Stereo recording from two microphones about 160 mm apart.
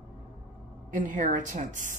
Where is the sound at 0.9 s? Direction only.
55° right (ahead or behind).